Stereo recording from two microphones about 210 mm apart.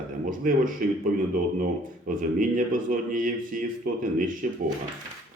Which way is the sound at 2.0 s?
40° right (ahead or behind).